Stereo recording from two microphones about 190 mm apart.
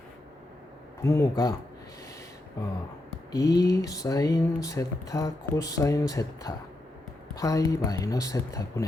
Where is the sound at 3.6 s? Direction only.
20° left (ahead or behind).